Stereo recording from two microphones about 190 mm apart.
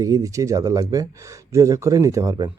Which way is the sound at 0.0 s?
15° right (ahead or behind).